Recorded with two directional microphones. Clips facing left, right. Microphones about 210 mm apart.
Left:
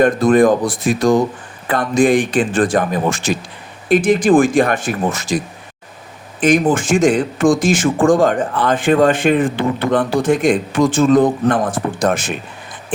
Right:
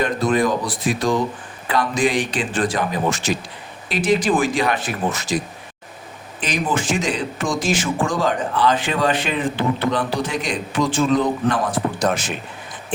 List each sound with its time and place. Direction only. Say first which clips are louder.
0.0 s speech: left 8 dB; 50° left (ahead or behind)
6.4 s speech: left 9 dB; 50° left (ahead or behind)